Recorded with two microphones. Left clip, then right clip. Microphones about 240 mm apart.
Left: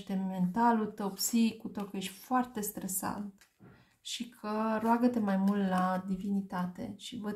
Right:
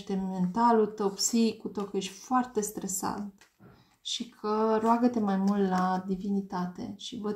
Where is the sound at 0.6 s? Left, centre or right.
Left.